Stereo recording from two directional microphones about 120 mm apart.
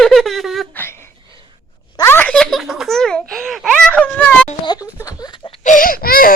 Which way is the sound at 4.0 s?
10° left (ahead or behind).